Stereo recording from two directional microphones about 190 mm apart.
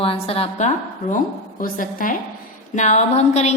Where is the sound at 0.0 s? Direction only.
30° left (ahead or behind).